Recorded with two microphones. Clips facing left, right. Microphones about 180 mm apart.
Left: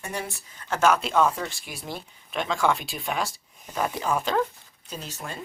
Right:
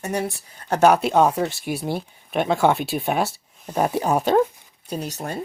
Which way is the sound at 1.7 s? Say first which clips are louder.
Right 11 dB; 65° right (ahead or behind).